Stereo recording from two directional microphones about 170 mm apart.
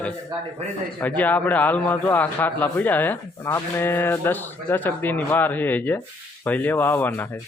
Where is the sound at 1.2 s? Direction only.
10° left (ahead or behind).